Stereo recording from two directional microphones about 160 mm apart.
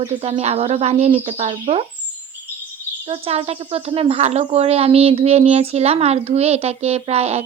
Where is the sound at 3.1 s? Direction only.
35° right (ahead or behind).